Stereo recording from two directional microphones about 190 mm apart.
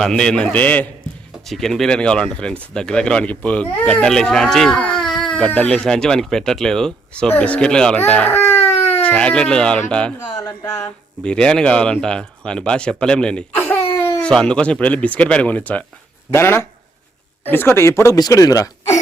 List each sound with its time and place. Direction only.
0.0 s speech: 5° left (ahead or behind)
11.2 s speech: 5° left (ahead or behind)